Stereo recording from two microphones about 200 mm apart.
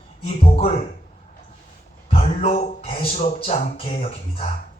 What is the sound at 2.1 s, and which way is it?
Speech, 30° left (ahead or behind).